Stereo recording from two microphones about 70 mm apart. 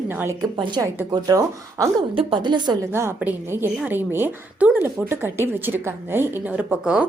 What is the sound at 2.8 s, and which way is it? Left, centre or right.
Speech, right.